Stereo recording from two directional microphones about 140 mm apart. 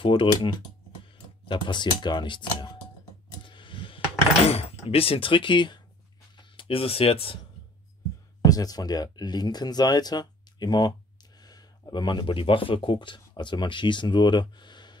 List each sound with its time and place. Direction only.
0.0 s speech: 40° left (ahead or behind)
3.4 s a sound: 35° left (ahead or behind)
4.5 s speech: 45° left (ahead or behind)
8.5 s speech: 25° left (ahead or behind)